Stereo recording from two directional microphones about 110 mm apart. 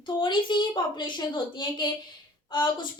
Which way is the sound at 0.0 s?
45° left (ahead or behind).